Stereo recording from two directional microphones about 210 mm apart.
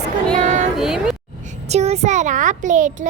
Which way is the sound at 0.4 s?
35° right (ahead or behind).